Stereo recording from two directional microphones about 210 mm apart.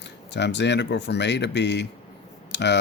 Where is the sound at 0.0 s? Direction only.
55° left (ahead or behind).